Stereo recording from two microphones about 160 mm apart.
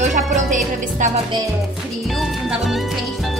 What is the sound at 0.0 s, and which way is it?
Music, 50° right (ahead or behind).